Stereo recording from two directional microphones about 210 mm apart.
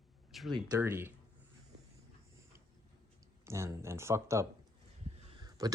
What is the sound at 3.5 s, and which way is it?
Speech, 15° right (ahead or behind).